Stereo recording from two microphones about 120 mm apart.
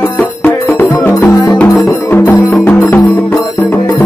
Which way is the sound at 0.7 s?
20° left (ahead or behind).